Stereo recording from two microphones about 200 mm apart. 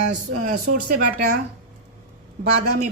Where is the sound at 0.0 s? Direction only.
40° right (ahead or behind).